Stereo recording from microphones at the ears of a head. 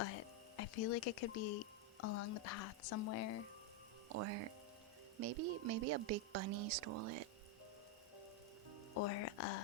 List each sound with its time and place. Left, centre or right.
0.0 s speech: left
4.1 s a woman's voice: right
9.0 s speech: left